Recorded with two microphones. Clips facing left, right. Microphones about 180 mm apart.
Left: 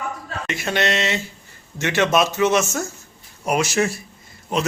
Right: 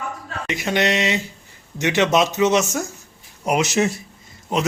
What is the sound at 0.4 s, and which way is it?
A man's voice, 15° right (ahead or behind).